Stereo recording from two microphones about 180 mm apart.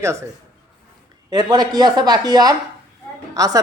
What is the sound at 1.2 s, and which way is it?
Speech, 20° right (ahead or behind).